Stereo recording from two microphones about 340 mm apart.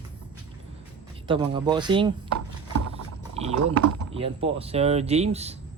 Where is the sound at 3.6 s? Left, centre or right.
Right.